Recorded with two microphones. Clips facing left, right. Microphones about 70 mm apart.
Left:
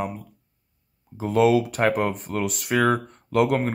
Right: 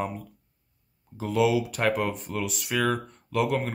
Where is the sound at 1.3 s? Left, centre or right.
Left.